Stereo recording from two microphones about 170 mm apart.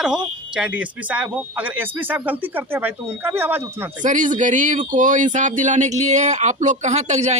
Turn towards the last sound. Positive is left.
turn(degrees=-40)  # may be behind; listen again after turning